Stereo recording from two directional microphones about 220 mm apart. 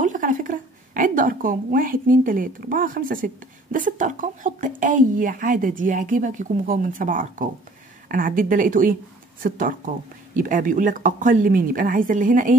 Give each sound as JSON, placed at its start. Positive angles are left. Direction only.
{"t": 0.0, "sound": "a woman's voice", "side_deg": -35}